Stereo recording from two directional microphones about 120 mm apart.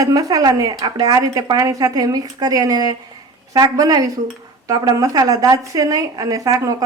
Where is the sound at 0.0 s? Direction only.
30° right (ahead or behind).